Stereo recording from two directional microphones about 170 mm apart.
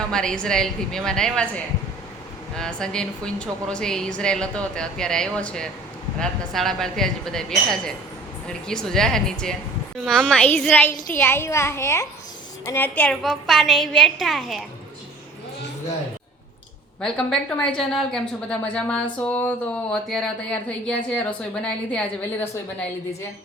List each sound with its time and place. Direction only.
0.1 s a woman's voice: 5° left (ahead or behind)
17.0 s a woman's voice: 5° left (ahead or behind)